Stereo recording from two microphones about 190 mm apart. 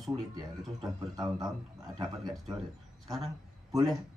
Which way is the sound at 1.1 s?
20° right (ahead or behind).